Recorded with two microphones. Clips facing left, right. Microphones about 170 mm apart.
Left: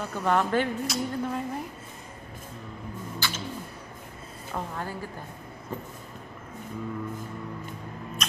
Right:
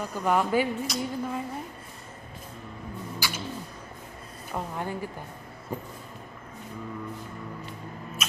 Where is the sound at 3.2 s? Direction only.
10° right (ahead or behind).